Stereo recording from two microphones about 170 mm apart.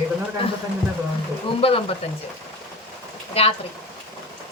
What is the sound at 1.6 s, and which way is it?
Speech, 35° left (ahead or behind).